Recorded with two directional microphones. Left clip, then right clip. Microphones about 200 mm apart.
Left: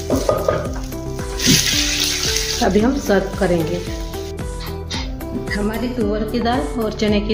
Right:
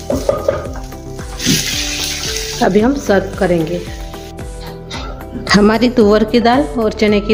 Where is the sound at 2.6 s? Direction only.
40° right (ahead or behind).